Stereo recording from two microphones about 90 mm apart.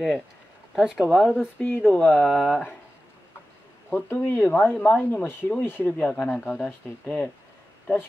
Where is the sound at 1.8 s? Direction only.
10° left (ahead or behind).